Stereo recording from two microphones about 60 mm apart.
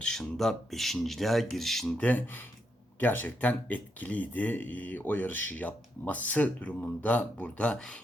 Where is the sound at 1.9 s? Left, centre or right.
Left.